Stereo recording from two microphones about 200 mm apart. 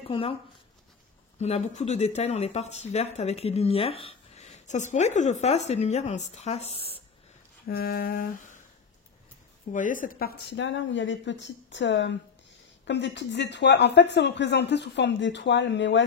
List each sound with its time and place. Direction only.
0.1 s speech: 25° left (ahead or behind)
1.4 s speech: 35° left (ahead or behind)
7.6 s a sound: 50° left (ahead or behind)
9.7 s speech: 40° left (ahead or behind); by 16.0 s 65° left (ahead or behind)